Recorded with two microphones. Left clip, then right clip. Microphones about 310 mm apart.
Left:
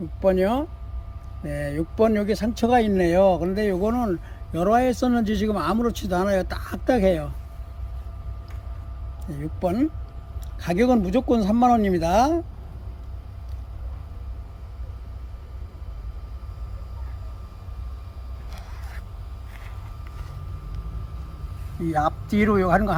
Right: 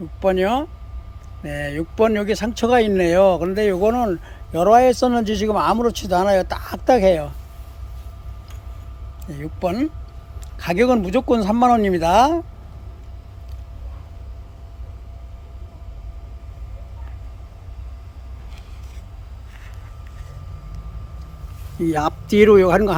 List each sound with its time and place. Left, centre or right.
0.2 s speech: centre
9.2 s a man's voice: centre
21.8 s speech: right